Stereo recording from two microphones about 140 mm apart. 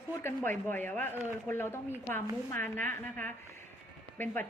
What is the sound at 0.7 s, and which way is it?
A woman's voice, 15° left (ahead or behind).